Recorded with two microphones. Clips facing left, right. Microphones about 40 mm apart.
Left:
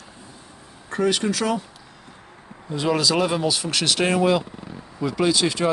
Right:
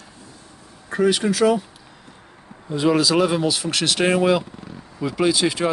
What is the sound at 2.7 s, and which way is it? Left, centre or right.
Speech, centre.